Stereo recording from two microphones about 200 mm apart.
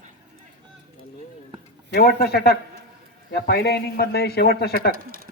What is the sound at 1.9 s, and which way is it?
Speech, 55° left (ahead or behind).